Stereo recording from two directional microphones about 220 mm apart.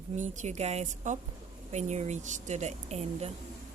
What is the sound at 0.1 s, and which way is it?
Speech, 30° right (ahead or behind).